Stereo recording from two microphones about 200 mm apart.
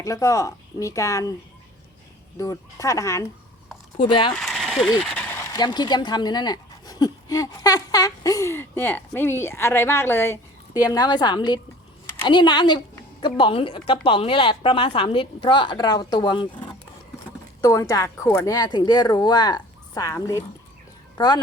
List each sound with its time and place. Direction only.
0.0 s speech: 15° left (ahead or behind)
2.4 s a woman's voice: 15° left (ahead or behind)
4.4 s a woman's voice: centre (ahead or behind); by 21.4 s 20° left (ahead or behind)